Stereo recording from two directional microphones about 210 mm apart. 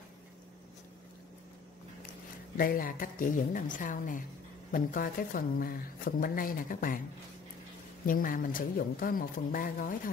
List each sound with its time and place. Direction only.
2.5 s speech: 45° left (ahead or behind)
8.1 s speech: 40° left (ahead or behind)